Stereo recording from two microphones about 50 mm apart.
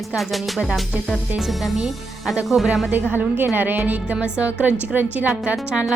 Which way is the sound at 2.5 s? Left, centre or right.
Centre.